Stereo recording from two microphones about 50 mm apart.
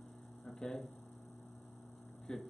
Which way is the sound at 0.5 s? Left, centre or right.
Centre.